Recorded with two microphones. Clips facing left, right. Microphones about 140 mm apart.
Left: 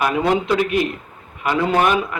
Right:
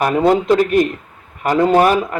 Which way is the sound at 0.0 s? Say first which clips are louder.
Right 4 dB; 40° right (ahead or behind).